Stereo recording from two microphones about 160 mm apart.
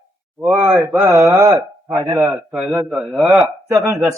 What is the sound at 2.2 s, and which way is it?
Speech, centre (ahead or behind).